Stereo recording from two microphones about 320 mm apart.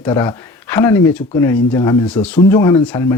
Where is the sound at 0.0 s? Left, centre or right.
Centre.